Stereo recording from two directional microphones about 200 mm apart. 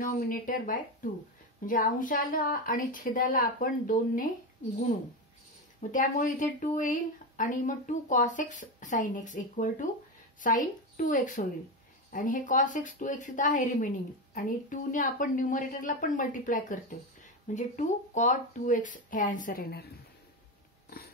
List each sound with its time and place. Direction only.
0.0 s a woman's voice: 40° left (ahead or behind)
5.8 s speech: 40° left (ahead or behind)